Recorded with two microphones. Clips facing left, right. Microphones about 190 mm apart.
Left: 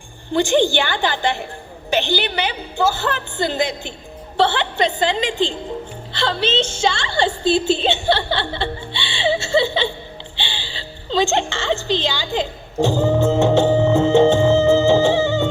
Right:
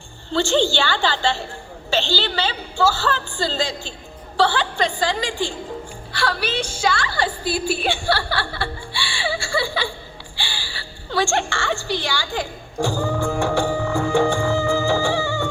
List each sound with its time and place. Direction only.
0.3 s a woman's voice: 15° left (ahead or behind)
10.3 s music: 20° left (ahead or behind)